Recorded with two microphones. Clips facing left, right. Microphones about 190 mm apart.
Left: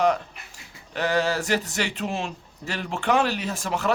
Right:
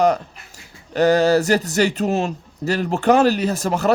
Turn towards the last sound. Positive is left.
turn(degrees=-40)  # may be behind; listen again after turning